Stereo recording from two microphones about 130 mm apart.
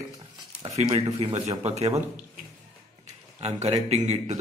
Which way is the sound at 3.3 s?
55° right (ahead or behind).